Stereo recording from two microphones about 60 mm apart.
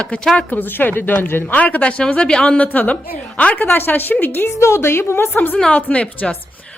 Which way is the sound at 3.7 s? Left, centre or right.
Left.